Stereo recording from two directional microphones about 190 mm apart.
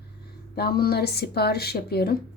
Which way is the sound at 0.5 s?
55° left (ahead or behind).